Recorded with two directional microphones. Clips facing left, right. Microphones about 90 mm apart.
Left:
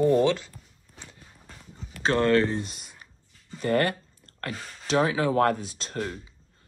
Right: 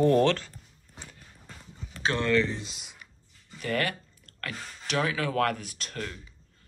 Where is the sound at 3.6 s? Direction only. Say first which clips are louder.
Left 6 dB; 35° left (ahead or behind).